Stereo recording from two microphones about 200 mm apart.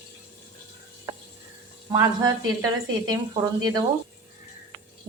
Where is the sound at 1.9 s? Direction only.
15° right (ahead or behind).